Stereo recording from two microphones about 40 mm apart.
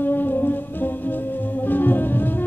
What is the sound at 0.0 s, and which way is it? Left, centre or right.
Music, left.